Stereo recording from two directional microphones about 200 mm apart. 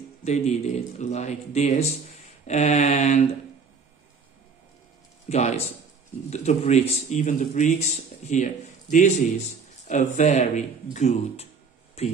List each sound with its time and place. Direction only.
0.2 s a man's voice: 35° left (ahead or behind)
5.3 s a man's voice: 35° left (ahead or behind)